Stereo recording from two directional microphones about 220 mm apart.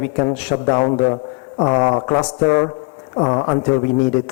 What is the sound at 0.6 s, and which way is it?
A man's voice, 25° left (ahead or behind).